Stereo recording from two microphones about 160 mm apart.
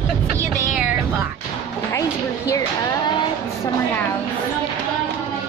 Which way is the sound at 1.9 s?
20° left (ahead or behind).